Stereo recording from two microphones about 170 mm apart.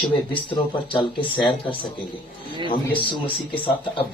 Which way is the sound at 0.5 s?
30° left (ahead or behind).